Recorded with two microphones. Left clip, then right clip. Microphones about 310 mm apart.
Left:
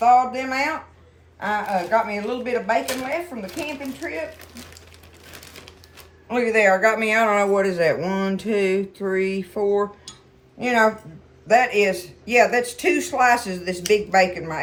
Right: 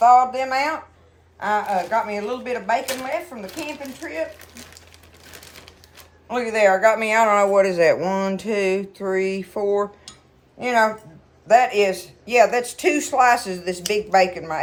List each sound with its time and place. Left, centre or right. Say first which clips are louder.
0.0 s speech: right 2 dB; centre
5.2 s crumpling: left 1 dB; centre
6.2 s speech: even; centre